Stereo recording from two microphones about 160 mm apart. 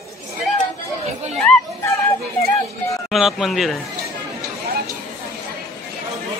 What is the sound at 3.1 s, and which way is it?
Speech, centre (ahead or behind).